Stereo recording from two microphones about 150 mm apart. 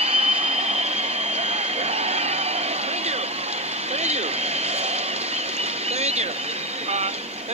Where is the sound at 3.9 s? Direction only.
45° right (ahead or behind).